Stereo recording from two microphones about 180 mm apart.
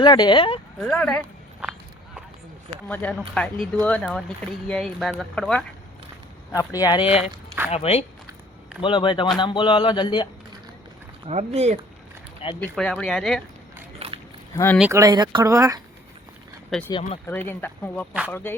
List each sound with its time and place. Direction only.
0.0 s speech: 25° left (ahead or behind)
0.8 s a sound: 5° left (ahead or behind)
2.8 s speech: 10° left (ahead or behind)
6.5 s speech: 20° left (ahead or behind)
11.3 s speech: 35° right (ahead or behind)
12.5 s speech: 5° left (ahead or behind)
14.0 s rowboat: 35° right (ahead or behind)
14.5 s speech: 15° left (ahead or behind)
14.8 s speech: 15° right (ahead or behind)
16.6 s speech: 5° left (ahead or behind)